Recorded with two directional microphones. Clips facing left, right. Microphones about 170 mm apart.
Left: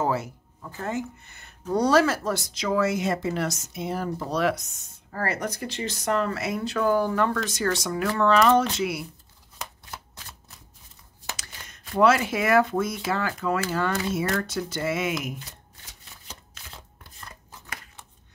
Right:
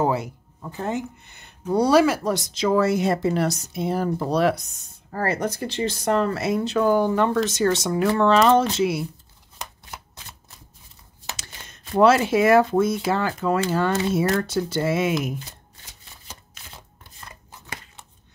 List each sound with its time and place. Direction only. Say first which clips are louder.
0.0 s speech: right 3 dB; 15° right (ahead or behind)
11.3 s speech: right 2 dB; 25° right (ahead or behind)